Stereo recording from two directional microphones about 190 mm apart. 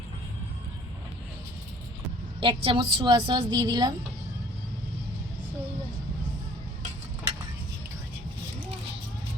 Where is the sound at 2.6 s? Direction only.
25° right (ahead or behind).